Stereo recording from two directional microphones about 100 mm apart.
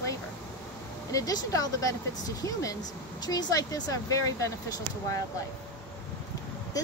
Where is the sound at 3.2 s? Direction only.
40° left (ahead or behind).